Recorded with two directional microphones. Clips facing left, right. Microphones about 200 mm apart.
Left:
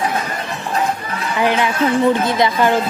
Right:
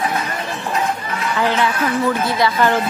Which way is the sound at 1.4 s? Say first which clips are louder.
Left 2 dB; 15° left (ahead or behind).